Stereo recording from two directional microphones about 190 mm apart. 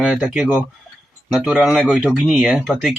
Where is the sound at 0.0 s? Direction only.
5° right (ahead or behind).